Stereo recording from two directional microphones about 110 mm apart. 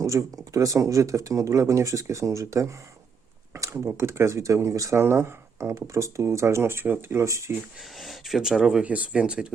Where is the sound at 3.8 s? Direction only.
25° right (ahead or behind).